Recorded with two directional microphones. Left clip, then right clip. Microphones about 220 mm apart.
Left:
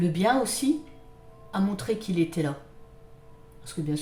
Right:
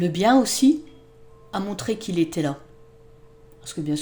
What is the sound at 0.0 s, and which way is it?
A woman's voice, 45° right (ahead or behind).